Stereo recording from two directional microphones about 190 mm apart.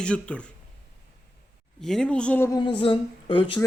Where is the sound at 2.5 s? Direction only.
25° left (ahead or behind).